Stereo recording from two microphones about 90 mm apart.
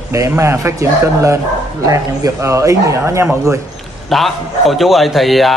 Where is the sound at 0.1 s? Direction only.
35° right (ahead or behind).